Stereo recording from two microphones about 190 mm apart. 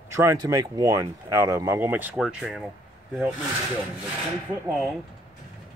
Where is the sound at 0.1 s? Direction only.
15° right (ahead or behind).